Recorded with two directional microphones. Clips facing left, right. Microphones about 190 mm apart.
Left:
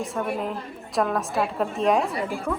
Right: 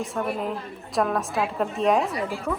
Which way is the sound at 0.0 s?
Centre (ahead or behind).